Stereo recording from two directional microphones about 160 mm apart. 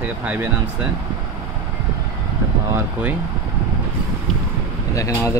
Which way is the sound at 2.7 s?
10° right (ahead or behind).